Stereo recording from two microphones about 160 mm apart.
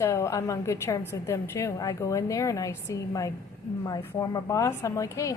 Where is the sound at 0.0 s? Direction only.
20° left (ahead or behind).